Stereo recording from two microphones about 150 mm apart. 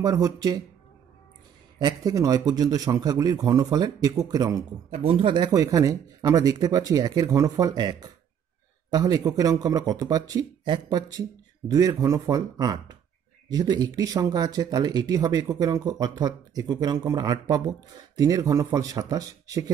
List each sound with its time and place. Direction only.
0.0 s speech: 25° right (ahead or behind)
1.8 s speech: 25° right (ahead or behind)
4.9 s speech: 35° right (ahead or behind)